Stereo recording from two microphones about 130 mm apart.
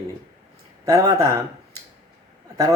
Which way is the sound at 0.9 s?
25° right (ahead or behind).